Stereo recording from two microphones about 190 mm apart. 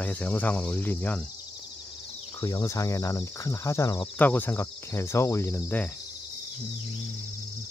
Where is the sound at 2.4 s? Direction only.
20° left (ahead or behind).